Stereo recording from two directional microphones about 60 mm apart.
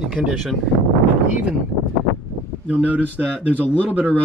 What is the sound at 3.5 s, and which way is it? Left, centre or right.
Speech, right.